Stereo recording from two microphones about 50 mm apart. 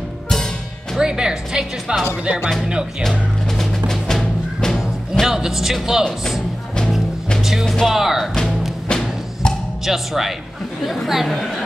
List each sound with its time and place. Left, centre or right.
0.9 s speech: centre
3.0 s music: centre
5.2 s speech: centre
7.8 s speech: centre
8.8 s music: centre
9.8 s speech: centre